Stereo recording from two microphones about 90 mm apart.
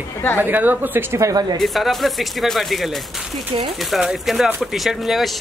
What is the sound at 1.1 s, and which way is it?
Speech, 40° right (ahead or behind).